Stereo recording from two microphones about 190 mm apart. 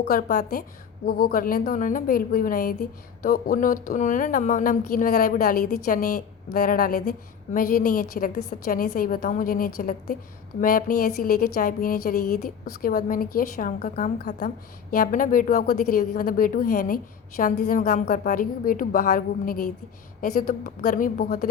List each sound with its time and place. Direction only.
0.0 s speech: 55° left (ahead or behind)